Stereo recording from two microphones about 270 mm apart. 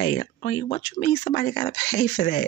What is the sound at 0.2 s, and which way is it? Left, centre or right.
Speech, left.